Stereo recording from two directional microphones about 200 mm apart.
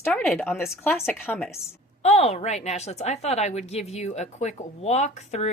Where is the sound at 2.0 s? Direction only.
35° left (ahead or behind).